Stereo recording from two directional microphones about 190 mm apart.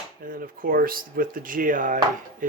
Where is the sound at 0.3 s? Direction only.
50° right (ahead or behind).